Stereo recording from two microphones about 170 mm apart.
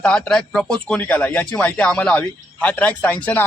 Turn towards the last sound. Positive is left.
turn(degrees=10)  # may be behind; listen again after turning